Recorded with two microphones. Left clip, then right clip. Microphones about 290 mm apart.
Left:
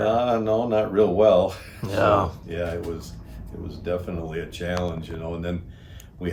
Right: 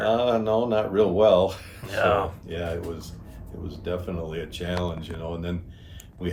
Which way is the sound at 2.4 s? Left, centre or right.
Centre.